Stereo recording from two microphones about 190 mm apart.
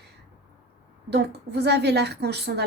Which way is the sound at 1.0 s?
60° right (ahead or behind).